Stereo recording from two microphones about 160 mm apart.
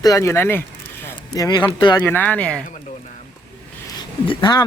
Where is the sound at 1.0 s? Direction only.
20° left (ahead or behind).